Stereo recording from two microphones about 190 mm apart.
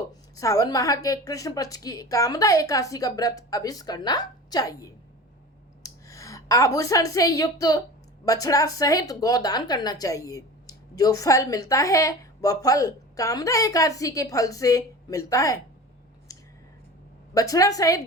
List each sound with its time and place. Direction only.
0.1 s a woman's voice: 20° left (ahead or behind)
16.3 s a sound: 20° left (ahead or behind)
17.3 s speech: 20° left (ahead or behind)